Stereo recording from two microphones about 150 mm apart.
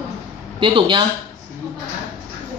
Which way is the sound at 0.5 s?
30° right (ahead or behind).